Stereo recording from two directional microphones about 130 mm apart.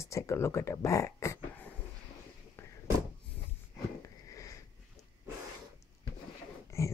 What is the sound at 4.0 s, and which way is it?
Sniff, 25° left (ahead or behind).